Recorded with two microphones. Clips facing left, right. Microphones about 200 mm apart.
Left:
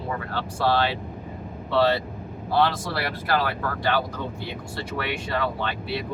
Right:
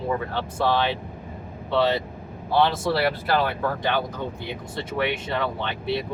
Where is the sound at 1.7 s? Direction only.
20° right (ahead or behind).